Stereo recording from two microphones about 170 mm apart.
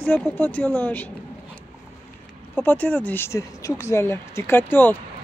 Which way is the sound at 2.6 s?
10° left (ahead or behind).